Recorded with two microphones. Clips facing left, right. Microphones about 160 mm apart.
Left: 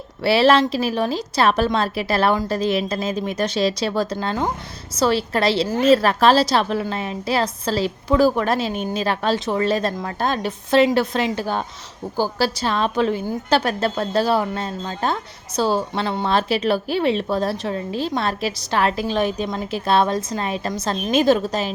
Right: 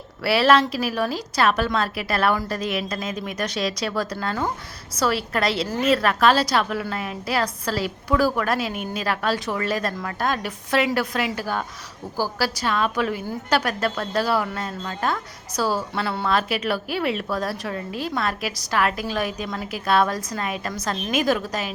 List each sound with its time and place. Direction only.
0.2 s a woman's voice: 25° left (ahead or behind)